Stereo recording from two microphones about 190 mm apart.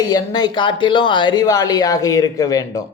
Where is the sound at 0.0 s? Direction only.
20° left (ahead or behind).